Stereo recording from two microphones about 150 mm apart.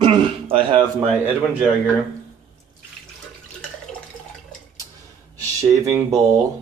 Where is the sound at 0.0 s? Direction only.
35° right (ahead or behind).